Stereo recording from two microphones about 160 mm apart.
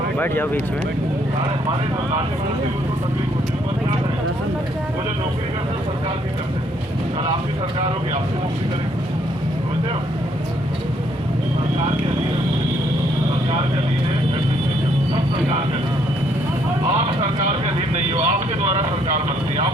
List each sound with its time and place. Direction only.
0.2 s speech: 10° left (ahead or behind)
18.1 s speech: 50° right (ahead or behind)